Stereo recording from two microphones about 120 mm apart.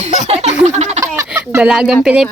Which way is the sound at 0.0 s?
70° right (ahead or behind).